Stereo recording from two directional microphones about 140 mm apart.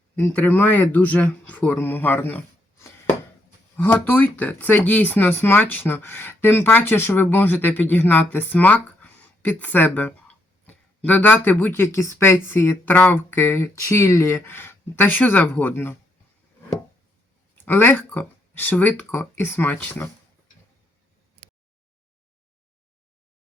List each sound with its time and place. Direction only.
0.2 s speech: 10° left (ahead or behind)
17.7 s speech: 15° left (ahead or behind)